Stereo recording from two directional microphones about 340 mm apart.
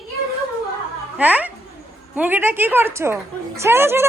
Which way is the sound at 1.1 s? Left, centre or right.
Centre.